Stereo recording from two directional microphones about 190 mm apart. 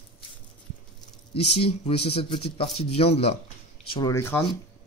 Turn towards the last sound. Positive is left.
turn(degrees=15)  # may be behind; listen again after turning